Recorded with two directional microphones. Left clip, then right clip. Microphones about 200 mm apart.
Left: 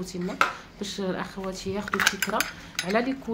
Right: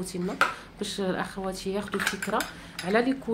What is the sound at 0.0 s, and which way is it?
A woman's voice, 10° right (ahead or behind).